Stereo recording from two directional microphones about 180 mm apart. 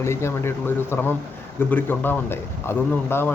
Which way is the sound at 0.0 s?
15° left (ahead or behind).